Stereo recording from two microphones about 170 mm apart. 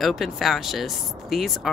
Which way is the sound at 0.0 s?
Centre (ahead or behind).